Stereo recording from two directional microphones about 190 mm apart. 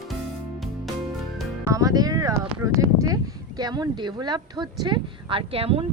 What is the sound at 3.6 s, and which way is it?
Speech, 20° right (ahead or behind).